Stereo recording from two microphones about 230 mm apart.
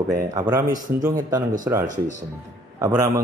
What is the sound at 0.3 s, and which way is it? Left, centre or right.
A man's voice, centre.